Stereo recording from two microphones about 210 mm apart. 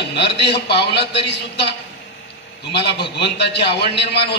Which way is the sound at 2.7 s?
55° left (ahead or behind).